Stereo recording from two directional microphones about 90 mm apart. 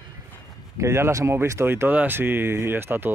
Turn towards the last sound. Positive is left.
turn(degrees=-25)  # may be behind; listen again after turning